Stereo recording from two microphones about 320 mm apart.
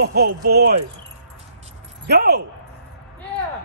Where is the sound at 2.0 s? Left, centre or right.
Right.